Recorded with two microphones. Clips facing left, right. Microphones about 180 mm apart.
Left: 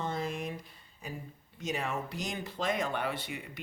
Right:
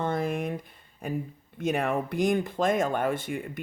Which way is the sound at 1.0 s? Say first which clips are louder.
Right 11 dB; 55° right (ahead or behind).